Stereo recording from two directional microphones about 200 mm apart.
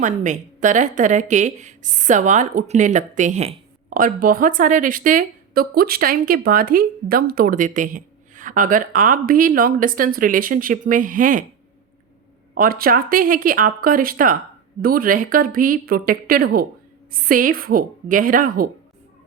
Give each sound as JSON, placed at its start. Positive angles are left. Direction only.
{"t": 0.0, "sound": "a woman's voice", "side_deg": -40}
{"t": 12.5, "sound": "speech", "side_deg": -45}